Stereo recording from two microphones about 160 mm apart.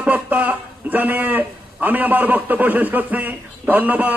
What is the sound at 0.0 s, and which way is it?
A man's voice, 10° right (ahead or behind).